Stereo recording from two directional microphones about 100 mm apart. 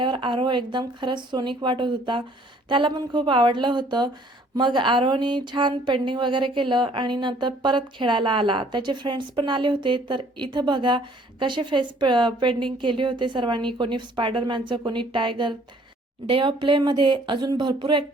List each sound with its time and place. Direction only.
0.0 s speech: 55° right (ahead or behind)